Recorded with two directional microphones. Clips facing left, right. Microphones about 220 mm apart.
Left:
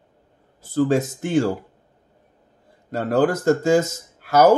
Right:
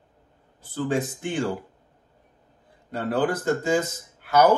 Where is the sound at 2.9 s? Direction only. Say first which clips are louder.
Left 5 dB; 45° left (ahead or behind).